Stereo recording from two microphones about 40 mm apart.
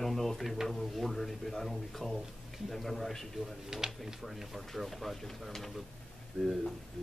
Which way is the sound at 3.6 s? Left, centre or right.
Centre.